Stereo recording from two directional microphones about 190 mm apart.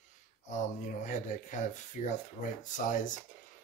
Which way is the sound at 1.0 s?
40° left (ahead or behind).